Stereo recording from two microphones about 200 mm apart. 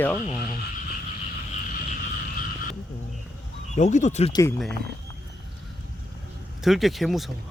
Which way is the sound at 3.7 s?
35° left (ahead or behind).